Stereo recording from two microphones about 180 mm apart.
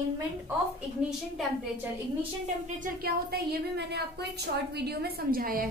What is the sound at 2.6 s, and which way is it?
A woman's voice, 50° right (ahead or behind).